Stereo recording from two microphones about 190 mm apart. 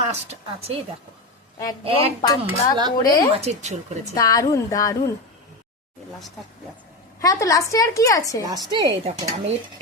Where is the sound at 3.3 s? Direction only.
35° right (ahead or behind).